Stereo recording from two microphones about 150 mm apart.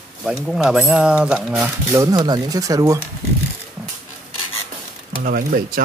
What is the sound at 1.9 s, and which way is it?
Speech, 20° right (ahead or behind).